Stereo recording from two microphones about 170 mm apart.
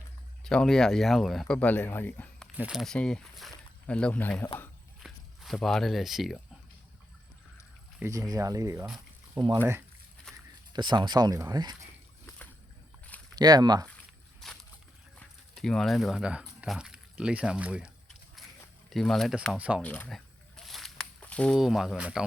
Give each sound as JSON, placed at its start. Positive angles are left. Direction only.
{"t": 0.4, "sound": "speech", "side_deg": 5}
{"t": 2.6, "sound": "speech", "side_deg": -5}
{"t": 5.0, "sound": "speech", "side_deg": 0}
{"t": 7.9, "sound": "speech", "side_deg": -15}
{"t": 10.3, "sound": "a sound", "side_deg": 5}
{"t": 10.7, "sound": "speech", "side_deg": -25}
{"t": 13.4, "sound": "speech", "side_deg": -25}
{"t": 14.4, "sound": "a sound", "side_deg": 0}
{"t": 15.5, "sound": "speech", "side_deg": 5}
{"t": 18.4, "sound": "a sound", "side_deg": 0}
{"t": 18.9, "sound": "speech", "side_deg": 0}
{"t": 19.5, "sound": "speech", "side_deg": -5}
{"t": 19.8, "sound": "speech", "side_deg": 10}
{"t": 20.7, "sound": "a sound", "side_deg": 0}